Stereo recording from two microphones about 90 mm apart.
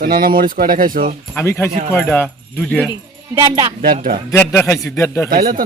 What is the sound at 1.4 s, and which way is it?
Speech, 25° left (ahead or behind).